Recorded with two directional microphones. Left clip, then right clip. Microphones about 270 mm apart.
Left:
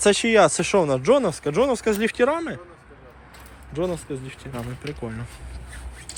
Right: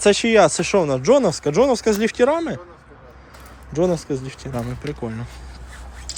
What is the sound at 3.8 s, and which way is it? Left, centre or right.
Speech, centre.